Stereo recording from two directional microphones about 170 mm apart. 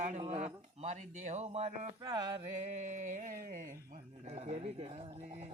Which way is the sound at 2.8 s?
50° right (ahead or behind).